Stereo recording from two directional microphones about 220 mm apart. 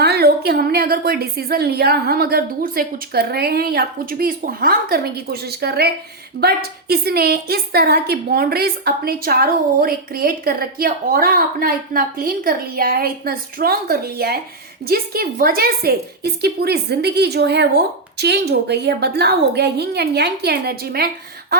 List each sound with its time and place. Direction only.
0.0 s a woman's voice: 45° right (ahead or behind)